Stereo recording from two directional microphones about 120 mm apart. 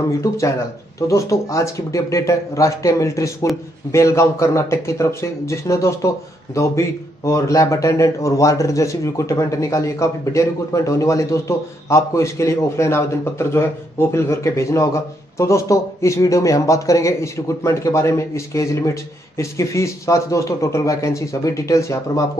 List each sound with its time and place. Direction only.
0.2 s speech: 25° left (ahead or behind)